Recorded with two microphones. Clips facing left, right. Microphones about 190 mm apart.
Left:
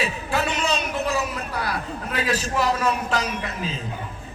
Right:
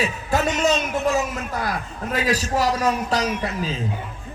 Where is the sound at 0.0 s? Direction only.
40° right (ahead or behind).